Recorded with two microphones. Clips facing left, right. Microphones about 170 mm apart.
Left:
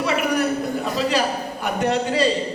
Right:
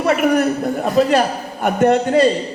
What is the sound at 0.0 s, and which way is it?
A man's voice, 50° right (ahead or behind).